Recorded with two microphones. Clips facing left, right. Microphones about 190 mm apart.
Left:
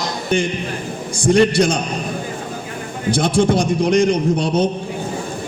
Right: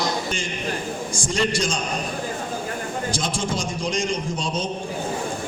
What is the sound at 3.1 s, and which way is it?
A man's voice, 60° left (ahead or behind).